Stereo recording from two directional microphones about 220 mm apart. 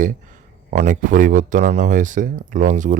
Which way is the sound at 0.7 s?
35° right (ahead or behind).